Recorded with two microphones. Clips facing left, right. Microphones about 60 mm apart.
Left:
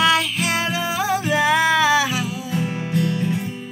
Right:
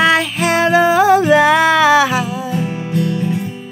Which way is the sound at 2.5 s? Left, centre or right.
Centre.